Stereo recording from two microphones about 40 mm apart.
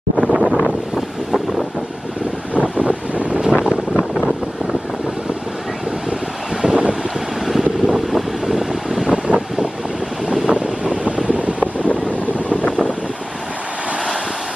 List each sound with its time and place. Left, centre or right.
0.2 s wind noise: centre
2.5 s wind noise: right
3.3 s wind noise: right
6.7 s wind noise: right
7.4 s vehicle: centre
9.0 s wind noise: right
10.4 s vehicle: right
11.2 s boat: right